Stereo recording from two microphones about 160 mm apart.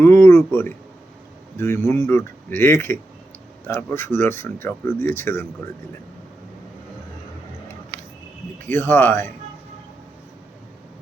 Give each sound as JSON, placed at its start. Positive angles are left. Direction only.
{"t": 0.0, "sound": "a man's voice", "side_deg": 15}
{"t": 8.6, "sound": "speech", "side_deg": 15}